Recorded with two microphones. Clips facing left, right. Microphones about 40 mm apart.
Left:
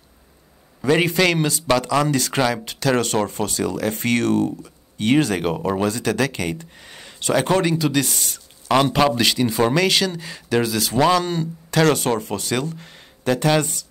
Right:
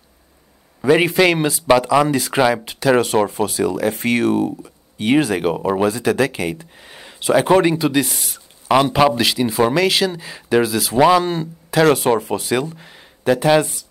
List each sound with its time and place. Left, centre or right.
0.7 s speech: centre